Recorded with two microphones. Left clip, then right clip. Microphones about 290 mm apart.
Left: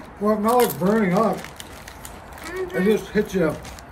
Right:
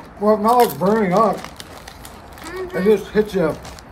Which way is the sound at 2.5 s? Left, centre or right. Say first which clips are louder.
Right 4 dB; centre.